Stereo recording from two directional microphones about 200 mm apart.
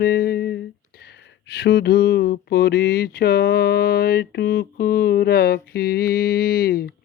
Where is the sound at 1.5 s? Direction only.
55° left (ahead or behind).